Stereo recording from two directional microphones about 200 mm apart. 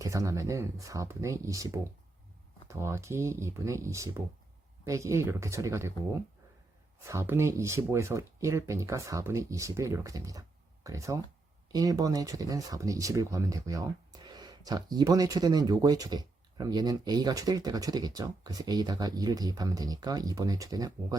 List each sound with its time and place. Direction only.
0.0 s speech: 15° right (ahead or behind)